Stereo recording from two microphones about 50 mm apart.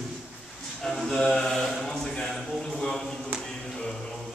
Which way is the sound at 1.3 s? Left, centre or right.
Centre.